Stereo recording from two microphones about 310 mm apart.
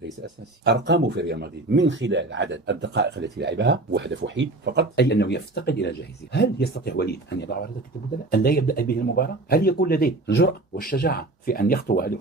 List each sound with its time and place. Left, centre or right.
0.7 s speech: right
4.9 s speech: left